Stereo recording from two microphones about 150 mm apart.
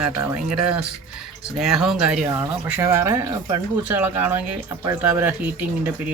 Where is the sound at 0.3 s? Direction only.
5° right (ahead or behind).